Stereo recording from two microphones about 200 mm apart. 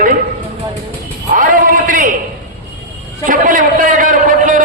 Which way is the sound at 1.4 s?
40° right (ahead or behind).